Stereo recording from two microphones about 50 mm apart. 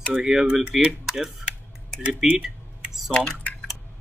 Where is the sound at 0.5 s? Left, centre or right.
Centre.